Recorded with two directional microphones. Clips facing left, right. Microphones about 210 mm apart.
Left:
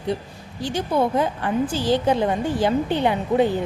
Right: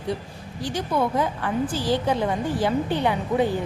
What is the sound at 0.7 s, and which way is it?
Speech, 25° left (ahead or behind).